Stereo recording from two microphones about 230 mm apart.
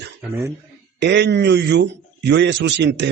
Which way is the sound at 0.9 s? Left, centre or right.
Right.